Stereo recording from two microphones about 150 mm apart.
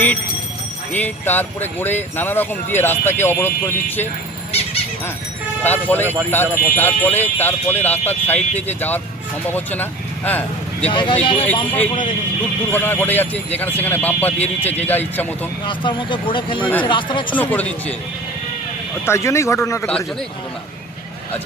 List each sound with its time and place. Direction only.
0.9 s speech: 10° left (ahead or behind)
5.6 s speech: 15° left (ahead or behind)
10.9 s speech: 35° left (ahead or behind)
12.7 s speech: 15° left (ahead or behind)
15.6 s speech: 35° left (ahead or behind)
17.3 s speech: 10° left (ahead or behind)
19.0 s speech: 20° left (ahead or behind)